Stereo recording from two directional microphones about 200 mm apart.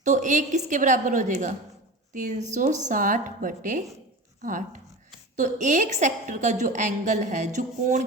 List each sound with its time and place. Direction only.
0.0 s a woman's voice: 40° right (ahead or behind)